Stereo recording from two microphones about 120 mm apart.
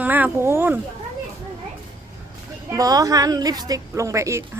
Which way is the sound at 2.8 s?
30° right (ahead or behind).